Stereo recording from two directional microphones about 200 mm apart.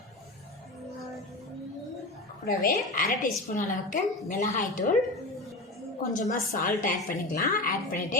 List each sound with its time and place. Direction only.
2.4 s a woman's voice: 45° left (ahead or behind)
6.1 s a woman's voice: 40° left (ahead or behind)